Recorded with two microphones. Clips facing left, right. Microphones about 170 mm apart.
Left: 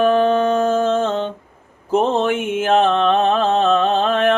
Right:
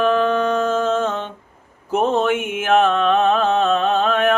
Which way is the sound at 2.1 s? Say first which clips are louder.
Left 1 dB; 30° left (ahead or behind).